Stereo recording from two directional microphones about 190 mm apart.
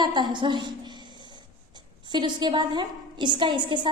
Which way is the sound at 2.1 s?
25° right (ahead or behind).